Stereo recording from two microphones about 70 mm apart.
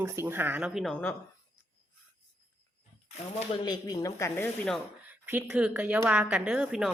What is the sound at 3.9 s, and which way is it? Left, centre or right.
Speech, left.